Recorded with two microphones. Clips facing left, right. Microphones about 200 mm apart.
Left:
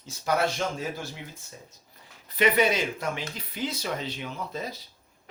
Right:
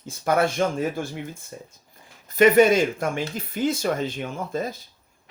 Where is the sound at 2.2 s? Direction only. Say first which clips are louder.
Right 8 dB; 45° right (ahead or behind).